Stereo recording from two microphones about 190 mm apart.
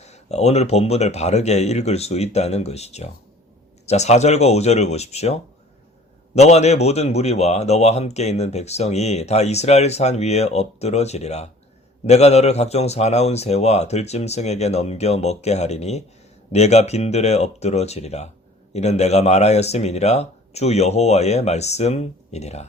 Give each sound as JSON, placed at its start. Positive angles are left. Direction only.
{"t": 0.0, "sound": "a man's voice", "side_deg": 35}